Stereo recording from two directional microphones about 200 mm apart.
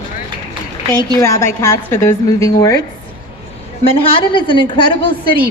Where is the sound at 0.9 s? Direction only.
15° left (ahead or behind).